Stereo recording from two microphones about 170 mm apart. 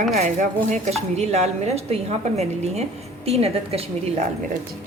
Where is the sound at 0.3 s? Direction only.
40° right (ahead or behind).